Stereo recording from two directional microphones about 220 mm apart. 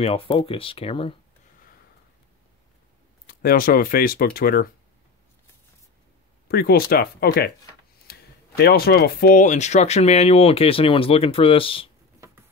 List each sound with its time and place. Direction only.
0.0 s speech: 25° left (ahead or behind)
3.3 s speech: 40° left (ahead or behind)
6.5 s speech: 45° left (ahead or behind); by 11.9 s 25° left (ahead or behind)